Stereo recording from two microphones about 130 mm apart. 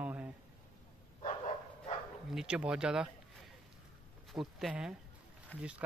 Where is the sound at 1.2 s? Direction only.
70° left (ahead or behind).